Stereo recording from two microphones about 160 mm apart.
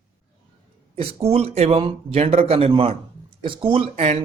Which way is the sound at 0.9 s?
35° right (ahead or behind).